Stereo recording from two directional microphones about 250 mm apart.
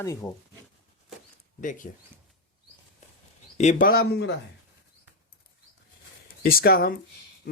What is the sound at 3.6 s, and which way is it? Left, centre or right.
Speech, left.